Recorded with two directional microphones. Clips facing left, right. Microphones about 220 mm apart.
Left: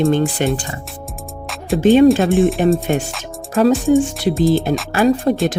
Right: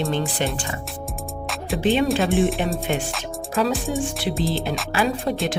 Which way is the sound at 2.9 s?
45° left (ahead or behind).